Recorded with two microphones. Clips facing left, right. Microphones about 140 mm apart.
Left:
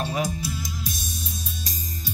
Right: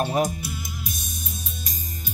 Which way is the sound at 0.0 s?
45° right (ahead or behind).